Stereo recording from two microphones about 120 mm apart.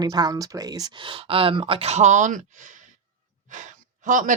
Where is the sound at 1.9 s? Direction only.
85° right.